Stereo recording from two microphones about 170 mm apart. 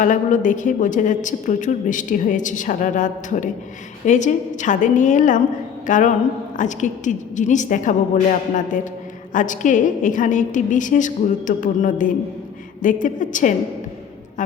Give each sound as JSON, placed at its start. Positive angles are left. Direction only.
{"t": 0.0, "sound": "a woman's voice", "side_deg": 50}
{"t": 5.8, "sound": "a sound", "side_deg": 50}
{"t": 6.6, "sound": "a woman's voice", "side_deg": 45}